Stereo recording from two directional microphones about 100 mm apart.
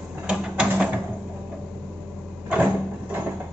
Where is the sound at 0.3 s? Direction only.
5° right (ahead or behind).